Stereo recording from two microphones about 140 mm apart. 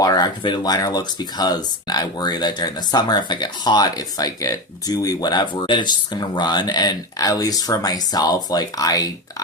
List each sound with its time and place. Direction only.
0.0 s speech: 30° left (ahead or behind)